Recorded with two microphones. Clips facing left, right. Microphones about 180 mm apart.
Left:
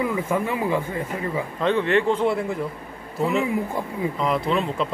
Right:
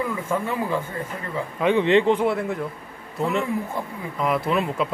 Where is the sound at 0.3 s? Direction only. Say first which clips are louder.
Even; 15° left (ahead or behind).